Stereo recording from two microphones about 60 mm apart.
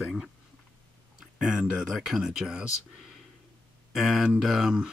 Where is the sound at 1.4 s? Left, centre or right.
Centre.